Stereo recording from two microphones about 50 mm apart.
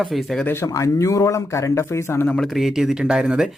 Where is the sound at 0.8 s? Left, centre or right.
Left.